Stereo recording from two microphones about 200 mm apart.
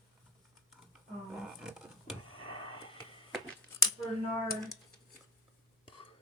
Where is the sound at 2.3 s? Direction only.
25° left (ahead or behind).